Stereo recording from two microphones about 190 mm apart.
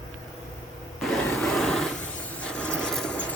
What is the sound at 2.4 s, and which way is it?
Filing, 5° left (ahead or behind).